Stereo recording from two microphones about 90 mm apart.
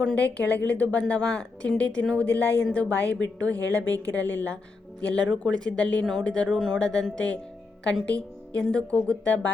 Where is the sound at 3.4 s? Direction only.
40° right (ahead or behind).